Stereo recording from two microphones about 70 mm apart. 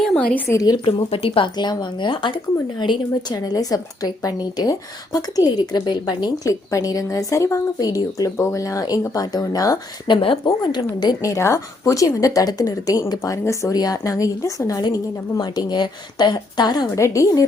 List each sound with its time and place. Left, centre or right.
0.5 s speech: left
1.5 s speech: left
6.5 s a woman's voice: left
10.1 s a woman's voice: left
11.2 s a woman's voice: left
13.7 s a woman's voice: left
14.8 s speech: left
16.9 s a woman's voice: left